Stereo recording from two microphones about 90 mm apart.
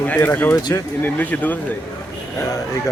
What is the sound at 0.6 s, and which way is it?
Speech, 50° left (ahead or behind).